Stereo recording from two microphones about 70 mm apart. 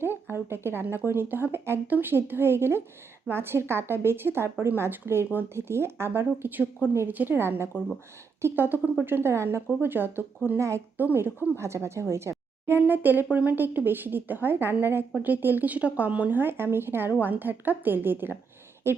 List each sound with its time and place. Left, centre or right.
0.3 s speech: right
10.6 s speech: right
10.9 s speech: right